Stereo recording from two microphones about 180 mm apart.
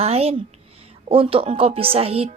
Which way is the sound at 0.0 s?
35° right (ahead or behind).